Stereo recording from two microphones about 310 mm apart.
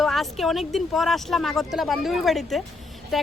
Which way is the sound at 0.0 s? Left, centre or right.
Centre.